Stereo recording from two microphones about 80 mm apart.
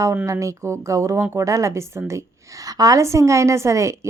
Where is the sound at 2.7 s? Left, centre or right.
Right.